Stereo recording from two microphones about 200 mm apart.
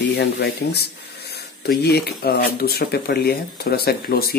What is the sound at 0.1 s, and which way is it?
Speech, 55° left (ahead or behind).